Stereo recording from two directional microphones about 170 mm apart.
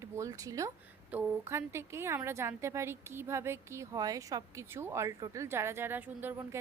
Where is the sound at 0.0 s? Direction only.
20° right (ahead or behind).